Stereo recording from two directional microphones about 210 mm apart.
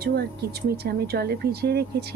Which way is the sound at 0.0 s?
50° right (ahead or behind).